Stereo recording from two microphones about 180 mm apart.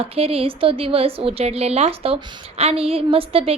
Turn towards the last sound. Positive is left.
turn(degrees=-30)  # may be behind; listen again after turning